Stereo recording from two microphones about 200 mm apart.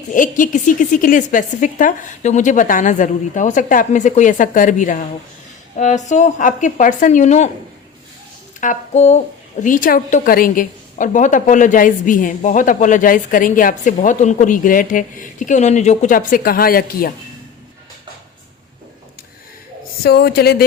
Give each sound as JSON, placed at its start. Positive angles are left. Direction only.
{"t": 0.1, "sound": "a woman's voice", "side_deg": 40}
{"t": 8.6, "sound": "a woman's voice", "side_deg": 35}
{"t": 20.0, "sound": "a woman's voice", "side_deg": 50}